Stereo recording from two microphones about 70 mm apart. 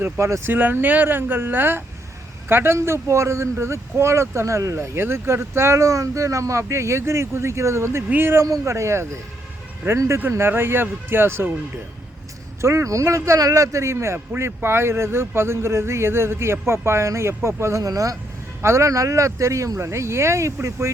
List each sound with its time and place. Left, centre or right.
0.2 s speech: right
0.5 s speech: right
4.9 s speech: right
8.6 s speech: right
12.6 s speech: right
18.6 s speech: right